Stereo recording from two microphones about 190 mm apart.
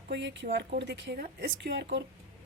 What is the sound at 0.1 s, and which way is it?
A woman's voice, 70° right (ahead or behind).